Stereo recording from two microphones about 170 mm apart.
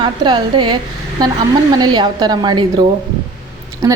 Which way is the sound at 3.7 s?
20° right (ahead or behind).